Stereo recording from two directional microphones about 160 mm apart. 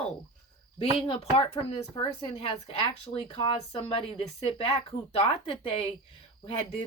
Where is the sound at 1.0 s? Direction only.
35° left (ahead or behind).